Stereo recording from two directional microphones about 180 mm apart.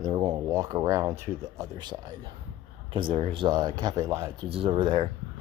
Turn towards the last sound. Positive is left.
turn(degrees=-30)  # may be behind; listen again after turning